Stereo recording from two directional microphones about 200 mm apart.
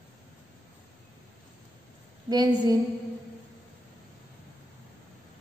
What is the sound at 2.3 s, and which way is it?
Speech, 20° right (ahead or behind).